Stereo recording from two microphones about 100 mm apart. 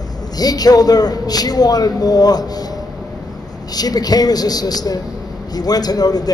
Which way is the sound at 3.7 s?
40° left (ahead or behind).